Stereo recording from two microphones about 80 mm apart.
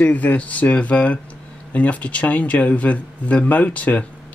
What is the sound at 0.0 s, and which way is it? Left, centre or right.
Speech, centre.